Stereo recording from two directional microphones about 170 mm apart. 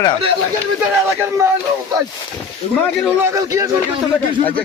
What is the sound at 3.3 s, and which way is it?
Speech, 20° right (ahead or behind).